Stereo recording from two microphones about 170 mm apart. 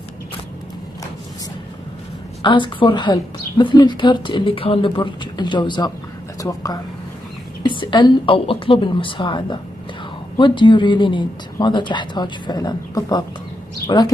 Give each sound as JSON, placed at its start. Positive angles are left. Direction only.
{"t": 2.4, "sound": "a woman's voice", "side_deg": 30}